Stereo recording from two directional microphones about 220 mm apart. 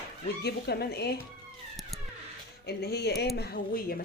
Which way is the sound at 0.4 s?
45° left (ahead or behind).